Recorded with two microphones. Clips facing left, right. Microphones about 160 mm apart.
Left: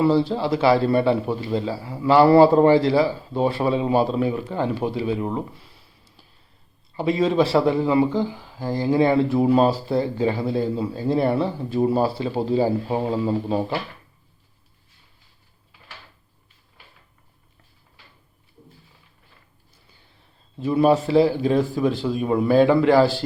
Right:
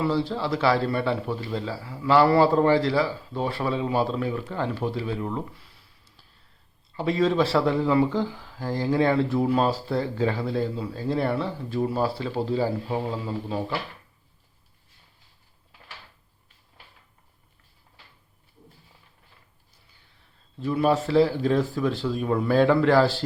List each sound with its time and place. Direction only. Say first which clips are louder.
0.2 s a man's voice: left 5 dB; 20° left (ahead or behind)
6.9 s speech: left 3 dB; 10° left (ahead or behind)
12.9 s a man's voice: left 6 dB; 30° left (ahead or behind)
20.6 s speech: left 5 dB; 20° left (ahead or behind)